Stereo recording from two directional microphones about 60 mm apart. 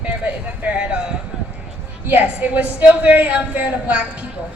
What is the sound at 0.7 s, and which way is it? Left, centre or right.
Speech, centre.